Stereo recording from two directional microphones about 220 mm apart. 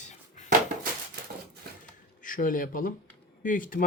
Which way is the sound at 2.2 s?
40° left (ahead or behind).